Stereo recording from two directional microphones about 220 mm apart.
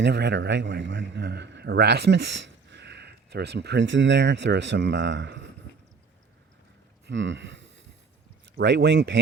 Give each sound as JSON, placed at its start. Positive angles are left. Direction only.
{"t": 0.0, "sound": "a man's voice", "side_deg": -50}
{"t": 7.1, "sound": "a man's voice", "side_deg": -55}